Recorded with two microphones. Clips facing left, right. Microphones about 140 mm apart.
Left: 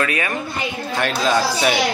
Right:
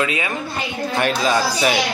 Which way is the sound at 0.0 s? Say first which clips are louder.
Even; 20° right (ahead or behind).